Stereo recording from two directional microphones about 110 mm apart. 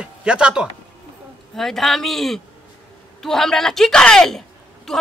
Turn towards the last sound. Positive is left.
turn(degrees=5)  # may be behind; listen again after turning